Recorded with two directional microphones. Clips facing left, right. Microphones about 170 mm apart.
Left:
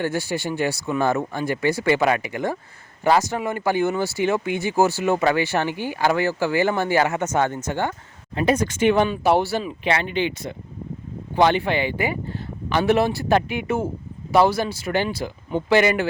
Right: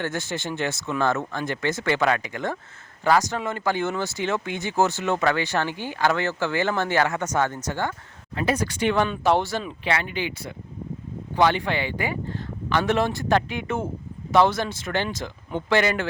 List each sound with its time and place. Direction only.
0.0 s speech: 10° left (ahead or behind)
9.9 s speech: 25° left (ahead or behind)